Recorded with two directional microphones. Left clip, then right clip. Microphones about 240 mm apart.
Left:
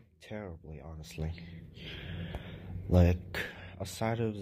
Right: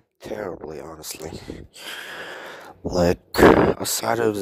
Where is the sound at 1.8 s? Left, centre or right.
Right.